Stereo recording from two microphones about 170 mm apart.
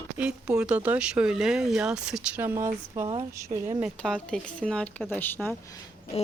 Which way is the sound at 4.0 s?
5° left (ahead or behind).